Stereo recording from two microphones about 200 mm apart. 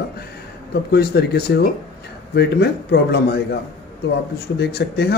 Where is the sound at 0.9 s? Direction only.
55° left (ahead or behind).